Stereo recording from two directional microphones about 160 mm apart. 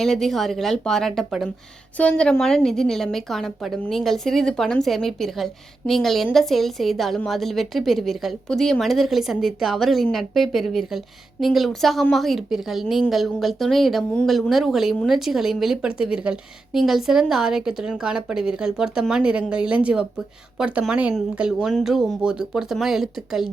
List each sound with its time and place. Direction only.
0.0 s speech: centre (ahead or behind)